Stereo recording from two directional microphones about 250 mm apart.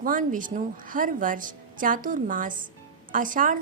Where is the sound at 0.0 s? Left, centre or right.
Right.